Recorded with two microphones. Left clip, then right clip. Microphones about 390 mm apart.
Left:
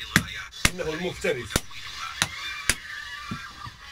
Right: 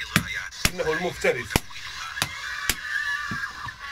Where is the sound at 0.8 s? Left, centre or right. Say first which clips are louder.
Right 4 dB; centre.